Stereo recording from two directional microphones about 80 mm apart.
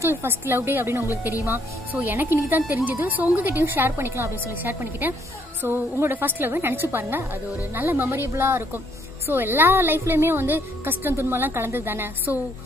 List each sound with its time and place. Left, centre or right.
0.0 s a woman's voice: right